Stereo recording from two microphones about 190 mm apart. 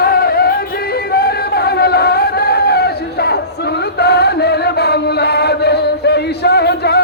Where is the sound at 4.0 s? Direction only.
60° left (ahead or behind).